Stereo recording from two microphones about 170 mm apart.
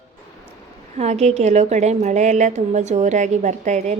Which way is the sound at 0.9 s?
40° right (ahead or behind).